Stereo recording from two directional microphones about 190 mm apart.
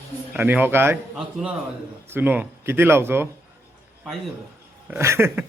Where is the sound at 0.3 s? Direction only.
10° right (ahead or behind).